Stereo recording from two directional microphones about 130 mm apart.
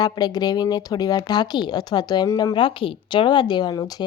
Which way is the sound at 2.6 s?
40° left (ahead or behind).